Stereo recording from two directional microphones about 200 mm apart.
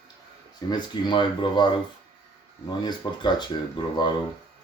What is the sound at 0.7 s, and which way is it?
Speech, 25° left (ahead or behind).